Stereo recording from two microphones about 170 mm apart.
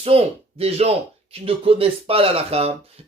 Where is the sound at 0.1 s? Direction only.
35° right (ahead or behind).